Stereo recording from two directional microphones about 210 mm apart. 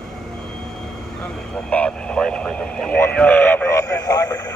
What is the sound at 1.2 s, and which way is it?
Speech, 5° left (ahead or behind).